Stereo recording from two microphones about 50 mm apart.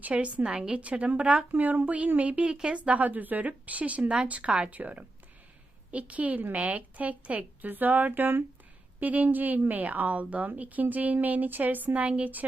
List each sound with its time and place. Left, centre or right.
0.0 s a woman's voice: right
1.5 s a woman's voice: right